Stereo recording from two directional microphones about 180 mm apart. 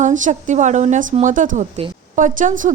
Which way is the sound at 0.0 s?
45° right (ahead or behind).